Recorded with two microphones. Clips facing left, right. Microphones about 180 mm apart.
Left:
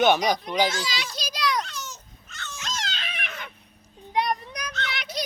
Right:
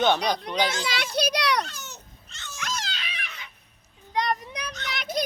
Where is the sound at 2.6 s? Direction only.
25° left (ahead or behind).